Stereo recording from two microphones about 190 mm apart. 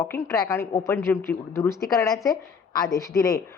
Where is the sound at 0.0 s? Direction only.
15° left (ahead or behind).